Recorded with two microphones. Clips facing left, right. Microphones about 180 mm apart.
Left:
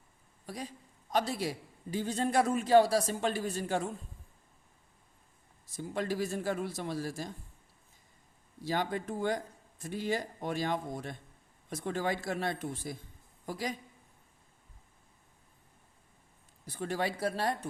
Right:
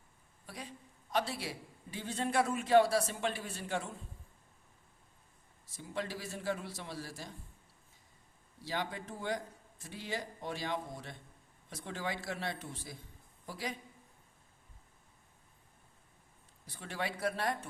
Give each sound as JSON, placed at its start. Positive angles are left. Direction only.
{"t": 0.4, "sound": "a woman's voice", "side_deg": 40}
{"t": 5.7, "sound": "a man's voice", "side_deg": 50}
{"t": 8.6, "sound": "a man's voice", "side_deg": 50}
{"t": 16.6, "sound": "a man's voice", "side_deg": 45}